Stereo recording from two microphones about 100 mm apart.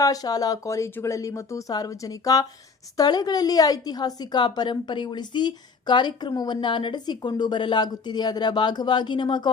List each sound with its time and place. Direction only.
0.0 s a woman's voice: 40° left (ahead or behind)